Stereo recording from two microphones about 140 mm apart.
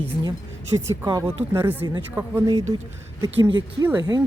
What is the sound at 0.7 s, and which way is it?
Speech, 20° right (ahead or behind).